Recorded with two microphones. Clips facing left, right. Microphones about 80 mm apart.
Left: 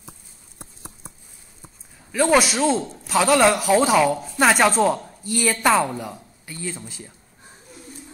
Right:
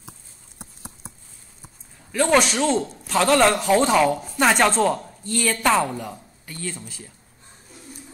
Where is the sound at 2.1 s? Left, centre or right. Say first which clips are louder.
Left 1 dB; centre.